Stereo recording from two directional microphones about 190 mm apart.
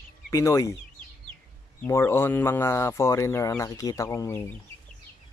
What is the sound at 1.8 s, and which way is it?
Speech, 10° left (ahead or behind).